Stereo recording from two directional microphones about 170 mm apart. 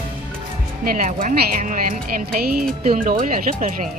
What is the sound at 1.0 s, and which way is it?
Speech, 50° right (ahead or behind).